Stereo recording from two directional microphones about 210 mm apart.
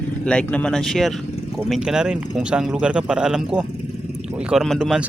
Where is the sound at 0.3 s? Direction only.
5° left (ahead or behind).